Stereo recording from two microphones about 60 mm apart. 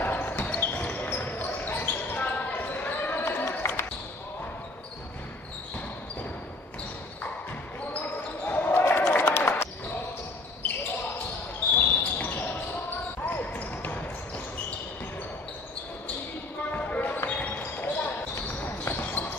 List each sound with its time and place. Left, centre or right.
0.0 s basketball bounce: left
3.3 s basketball bounce: left
7.9 s basketball bounce: left
8.7 s a sound: left
11.8 s basketball bounce: left
16.7 s basketball bounce: left